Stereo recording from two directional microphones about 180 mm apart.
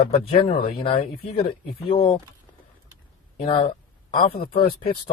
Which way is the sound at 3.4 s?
35° left (ahead or behind).